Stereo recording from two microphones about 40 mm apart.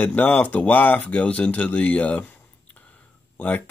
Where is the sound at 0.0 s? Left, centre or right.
Left.